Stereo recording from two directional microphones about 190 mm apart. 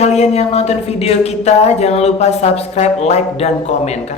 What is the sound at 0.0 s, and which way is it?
A woman's voice, 35° left (ahead or behind).